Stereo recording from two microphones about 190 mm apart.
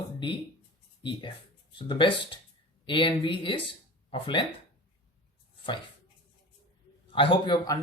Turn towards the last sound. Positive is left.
turn(degrees=20)  # may be behind; listen again after turning